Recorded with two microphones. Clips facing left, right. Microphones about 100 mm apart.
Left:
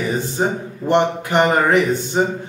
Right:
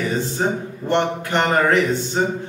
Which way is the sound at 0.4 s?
15° left (ahead or behind).